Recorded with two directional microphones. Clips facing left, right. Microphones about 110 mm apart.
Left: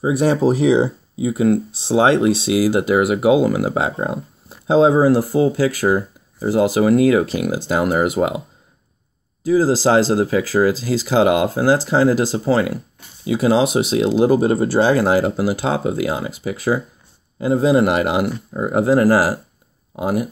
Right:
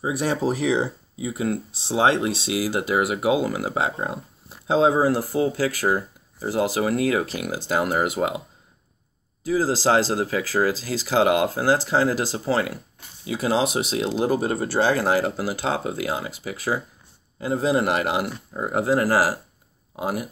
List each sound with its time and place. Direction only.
0.5 s speech: 20° left (ahead or behind)
9.5 s speech: 20° left (ahead or behind)